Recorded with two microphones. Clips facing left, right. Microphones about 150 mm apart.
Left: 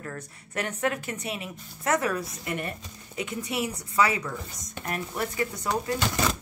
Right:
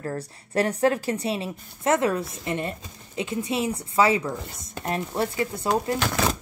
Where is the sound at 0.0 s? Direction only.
35° right (ahead or behind).